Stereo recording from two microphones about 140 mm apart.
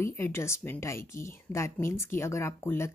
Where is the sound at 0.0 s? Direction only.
20° left (ahead or behind).